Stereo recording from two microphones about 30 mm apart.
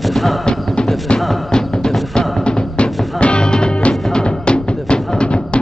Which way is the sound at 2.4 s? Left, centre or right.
Left.